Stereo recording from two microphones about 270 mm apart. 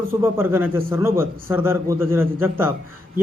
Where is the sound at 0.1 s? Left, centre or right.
Centre.